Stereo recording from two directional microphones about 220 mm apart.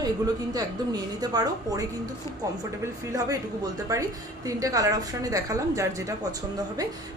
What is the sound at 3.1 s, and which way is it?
Speech, 15° right (ahead or behind).